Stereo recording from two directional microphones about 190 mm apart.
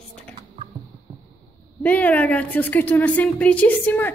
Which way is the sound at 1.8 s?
10° left (ahead or behind).